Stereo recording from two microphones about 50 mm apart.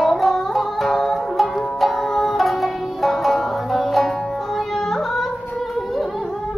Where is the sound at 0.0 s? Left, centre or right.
Centre.